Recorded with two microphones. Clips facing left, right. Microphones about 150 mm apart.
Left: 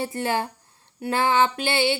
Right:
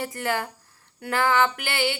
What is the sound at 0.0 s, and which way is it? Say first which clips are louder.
A woman's voice: left 2 dB; 25° left (ahead or behind).